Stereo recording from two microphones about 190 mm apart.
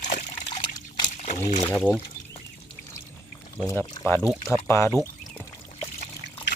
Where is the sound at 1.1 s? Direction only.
35° left (ahead or behind).